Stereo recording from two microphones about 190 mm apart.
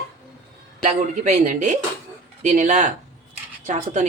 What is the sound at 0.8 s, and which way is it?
Speech, 40° right (ahead or behind).